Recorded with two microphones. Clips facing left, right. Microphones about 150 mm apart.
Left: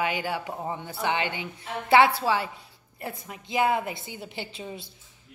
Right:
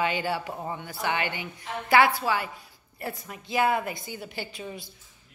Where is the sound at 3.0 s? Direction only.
20° left (ahead or behind).